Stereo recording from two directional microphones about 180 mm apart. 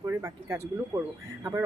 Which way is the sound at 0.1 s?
15° right (ahead or behind).